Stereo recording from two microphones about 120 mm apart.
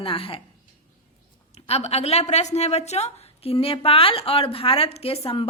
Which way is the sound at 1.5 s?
60° left (ahead or behind).